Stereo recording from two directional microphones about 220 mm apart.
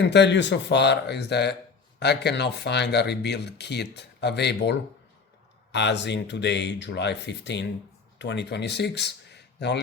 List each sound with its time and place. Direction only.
0.0 s speech: 50° left (ahead or behind)